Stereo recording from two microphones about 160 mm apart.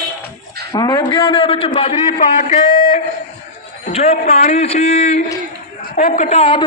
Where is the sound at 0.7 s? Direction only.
25° left (ahead or behind); by 3.0 s 55° left (ahead or behind).